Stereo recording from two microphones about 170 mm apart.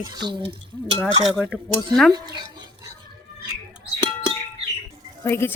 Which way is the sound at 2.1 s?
25° right (ahead or behind).